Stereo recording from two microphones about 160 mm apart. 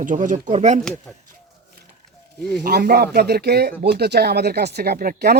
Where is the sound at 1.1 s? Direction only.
10° left (ahead or behind).